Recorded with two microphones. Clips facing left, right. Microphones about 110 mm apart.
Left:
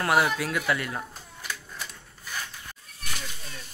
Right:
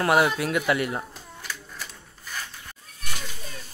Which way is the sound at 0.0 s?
25° right (ahead or behind).